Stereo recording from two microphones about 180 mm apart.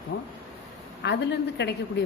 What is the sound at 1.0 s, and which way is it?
Speech, 75° left (ahead or behind).